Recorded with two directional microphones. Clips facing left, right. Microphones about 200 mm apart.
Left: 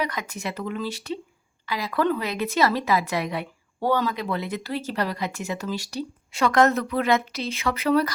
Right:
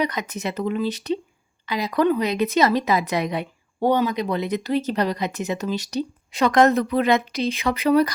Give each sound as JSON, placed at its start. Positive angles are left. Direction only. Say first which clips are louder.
{"t": 0.0, "sound": "speech", "louder": "right 4 dB", "side_deg": -20}